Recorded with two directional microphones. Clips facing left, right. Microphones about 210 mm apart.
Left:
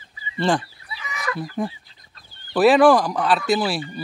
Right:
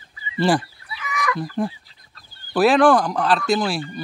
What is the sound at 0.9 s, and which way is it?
Chicken, 30° left (ahead or behind).